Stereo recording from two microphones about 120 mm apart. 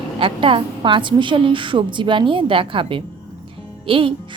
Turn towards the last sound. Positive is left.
turn(degrees=-45)  # may be behind; listen again after turning